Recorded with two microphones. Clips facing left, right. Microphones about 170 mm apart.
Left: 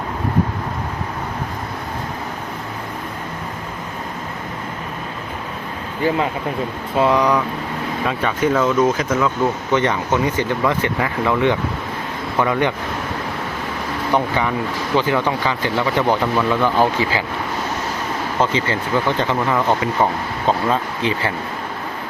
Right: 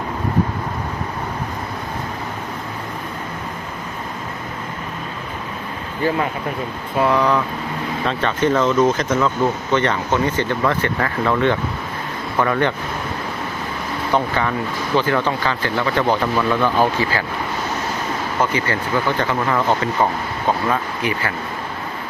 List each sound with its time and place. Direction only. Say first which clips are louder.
7.0 s speech: left 1 dB; 15° left (ahead or behind)
9.7 s speech: left 1 dB; 15° left (ahead or behind)
14.1 s speech: left 1 dB; 15° left (ahead or behind)
18.3 s speech: left 1 dB; 20° left (ahead or behind)
20.5 s speech: left 1 dB; 25° left (ahead or behind)